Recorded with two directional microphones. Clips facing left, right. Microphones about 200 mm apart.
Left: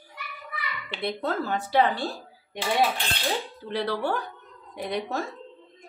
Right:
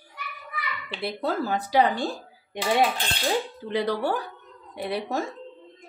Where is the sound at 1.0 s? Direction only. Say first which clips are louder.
Right 1 dB; 10° right (ahead or behind).